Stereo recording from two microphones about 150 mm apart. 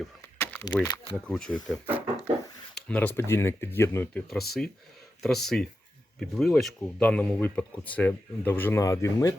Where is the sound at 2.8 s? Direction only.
10° left (ahead or behind).